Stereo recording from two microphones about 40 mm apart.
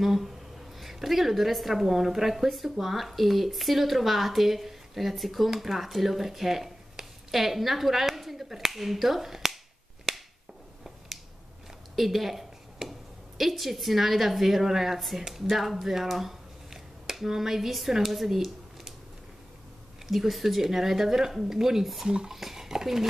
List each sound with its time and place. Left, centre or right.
0.0 s a woman's voice: centre
10.1 s a sound: centre
11.9 s a woman's voice: centre
20.1 s speech: centre
22.0 s stir: centre
22.3 s speech: centre